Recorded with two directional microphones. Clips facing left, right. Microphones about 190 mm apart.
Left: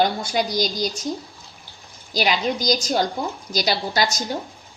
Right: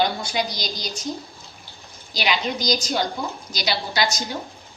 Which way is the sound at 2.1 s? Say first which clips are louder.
Left 3 dB; 45° left (ahead or behind).